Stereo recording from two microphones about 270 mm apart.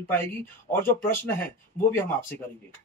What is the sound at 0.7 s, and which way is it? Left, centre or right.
Speech, centre.